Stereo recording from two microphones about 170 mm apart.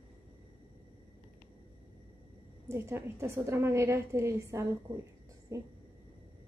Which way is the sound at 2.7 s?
15° right (ahead or behind).